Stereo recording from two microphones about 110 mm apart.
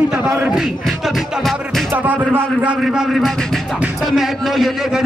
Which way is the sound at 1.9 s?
15° right (ahead or behind).